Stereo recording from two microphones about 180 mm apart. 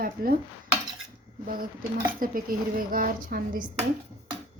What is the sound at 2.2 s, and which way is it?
A woman's voice, 50° right (ahead or behind).